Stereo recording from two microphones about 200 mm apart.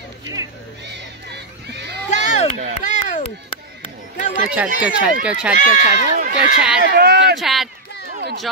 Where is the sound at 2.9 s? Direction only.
40° left (ahead or behind).